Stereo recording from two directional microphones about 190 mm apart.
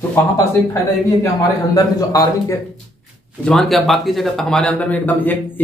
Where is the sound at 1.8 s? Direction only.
20° left (ahead or behind).